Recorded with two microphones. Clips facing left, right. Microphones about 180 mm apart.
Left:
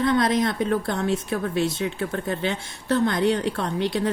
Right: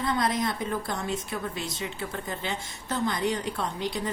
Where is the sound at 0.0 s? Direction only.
85° left.